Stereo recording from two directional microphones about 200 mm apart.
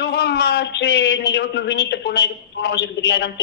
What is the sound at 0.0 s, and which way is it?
A woman's voice, 55° left (ahead or behind).